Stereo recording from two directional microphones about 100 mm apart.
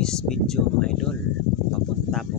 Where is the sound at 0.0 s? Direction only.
5° left (ahead or behind).